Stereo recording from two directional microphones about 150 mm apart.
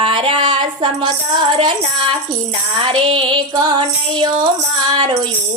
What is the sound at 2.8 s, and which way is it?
Music, 35° right (ahead or behind).